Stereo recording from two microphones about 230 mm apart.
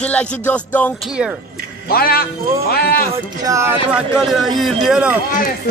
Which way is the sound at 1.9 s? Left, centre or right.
Left.